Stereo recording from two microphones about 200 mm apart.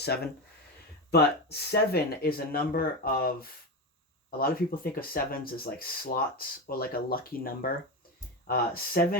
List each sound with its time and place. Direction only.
1.1 s speech: 55° left (ahead or behind)